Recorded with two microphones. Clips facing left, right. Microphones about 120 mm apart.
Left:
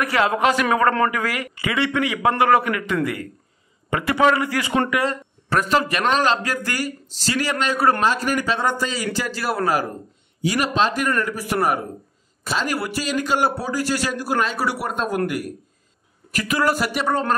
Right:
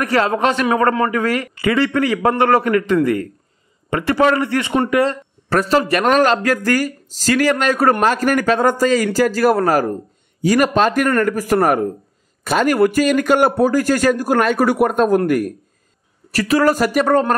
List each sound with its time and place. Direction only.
0.0 s a man's voice: 35° right (ahead or behind)
4.8 s speech: 35° right (ahead or behind)
16.3 s a man's voice: 35° right (ahead or behind)